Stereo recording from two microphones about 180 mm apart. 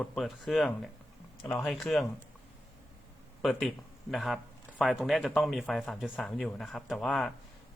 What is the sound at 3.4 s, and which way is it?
A man's voice, centre (ahead or behind).